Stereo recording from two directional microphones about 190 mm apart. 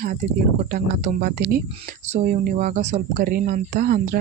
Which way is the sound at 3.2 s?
50° right (ahead or behind).